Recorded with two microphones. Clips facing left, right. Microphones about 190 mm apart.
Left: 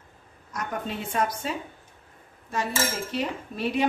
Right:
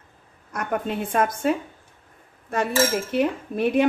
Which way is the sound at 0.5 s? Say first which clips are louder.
Right 5 dB; 55° right (ahead or behind).